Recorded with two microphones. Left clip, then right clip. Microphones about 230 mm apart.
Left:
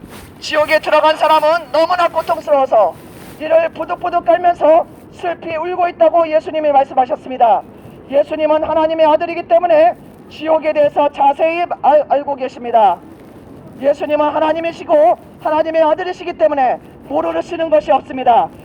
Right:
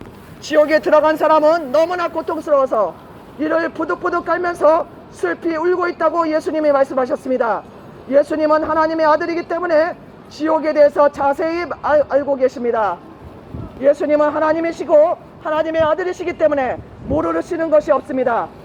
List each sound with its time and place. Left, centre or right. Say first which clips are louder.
0.4 s speech: even; left